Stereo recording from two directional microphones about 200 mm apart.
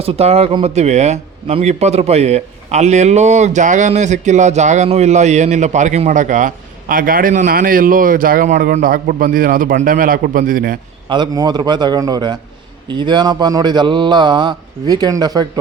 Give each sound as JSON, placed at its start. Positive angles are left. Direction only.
{"t": 0.0, "sound": "a man's voice", "side_deg": -30}
{"t": 11.1, "sound": "a man's voice", "side_deg": -20}